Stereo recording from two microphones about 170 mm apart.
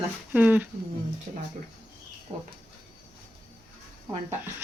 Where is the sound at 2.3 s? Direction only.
30° right (ahead or behind).